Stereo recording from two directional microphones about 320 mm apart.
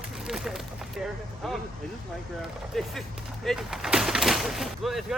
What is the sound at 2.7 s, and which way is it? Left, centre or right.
Speech, centre.